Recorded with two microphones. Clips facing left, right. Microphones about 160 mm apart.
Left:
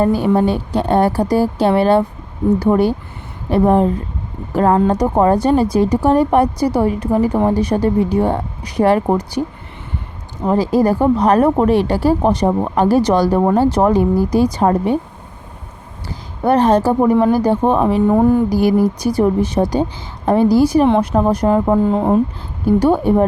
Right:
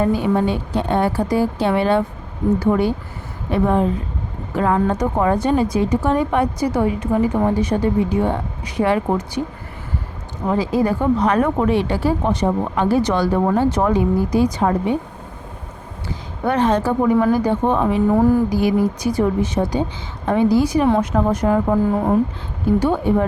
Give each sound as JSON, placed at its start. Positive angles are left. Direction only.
{"t": 0.0, "sound": "speech", "side_deg": 35}
{"t": 10.4, "sound": "speech", "side_deg": 35}
{"t": 16.0, "sound": "speech", "side_deg": 35}
{"t": 18.4, "sound": "a woman's voice", "side_deg": 40}
{"t": 22.8, "sound": "speech", "side_deg": 35}